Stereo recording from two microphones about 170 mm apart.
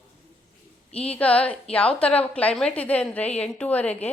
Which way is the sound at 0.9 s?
35° left (ahead or behind).